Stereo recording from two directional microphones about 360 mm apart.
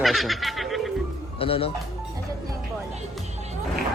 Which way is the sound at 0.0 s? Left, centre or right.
Centre.